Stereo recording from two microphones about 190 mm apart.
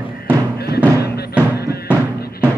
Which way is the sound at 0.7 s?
10° right (ahead or behind).